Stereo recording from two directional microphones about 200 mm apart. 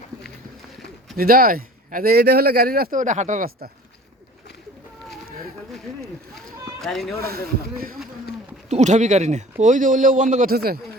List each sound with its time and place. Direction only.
1.1 s speech: 50° right (ahead or behind)
6.8 s speech: centre (ahead or behind)
7.3 s speech: 50° right (ahead or behind)
8.7 s a man's voice: 35° right (ahead or behind)